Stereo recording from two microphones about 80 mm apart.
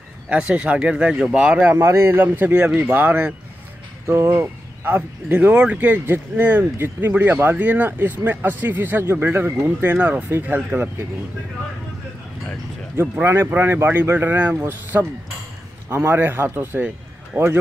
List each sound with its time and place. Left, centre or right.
0.3 s speech: centre
1.8 s speech: right
4.9 s speech: centre
12.9 s a man's voice: right